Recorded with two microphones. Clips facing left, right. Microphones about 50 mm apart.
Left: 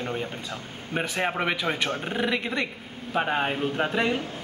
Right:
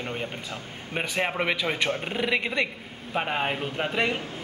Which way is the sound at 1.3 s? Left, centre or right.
Centre.